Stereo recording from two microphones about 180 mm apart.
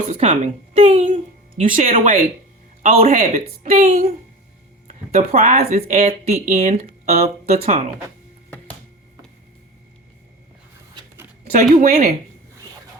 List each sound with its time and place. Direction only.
0.1 s speech: 35° right (ahead or behind)
1.7 s speech: 45° right (ahead or behind)
11.5 s speech: 45° right (ahead or behind)